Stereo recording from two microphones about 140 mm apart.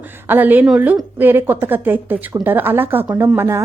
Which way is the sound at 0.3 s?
15° right (ahead or behind).